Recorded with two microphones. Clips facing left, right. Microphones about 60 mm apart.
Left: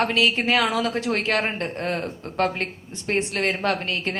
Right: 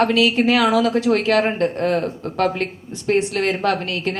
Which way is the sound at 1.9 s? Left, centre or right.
Right.